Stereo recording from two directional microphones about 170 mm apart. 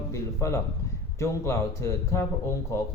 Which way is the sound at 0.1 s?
20° left (ahead or behind).